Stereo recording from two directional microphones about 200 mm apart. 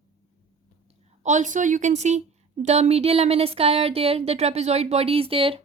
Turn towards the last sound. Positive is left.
turn(degrees=-30)  # may be behind; listen again after turning